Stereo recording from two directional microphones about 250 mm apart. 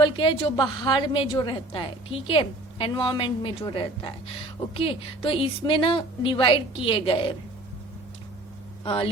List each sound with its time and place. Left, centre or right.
0.0 s a woman's voice: centre
8.8 s speech: left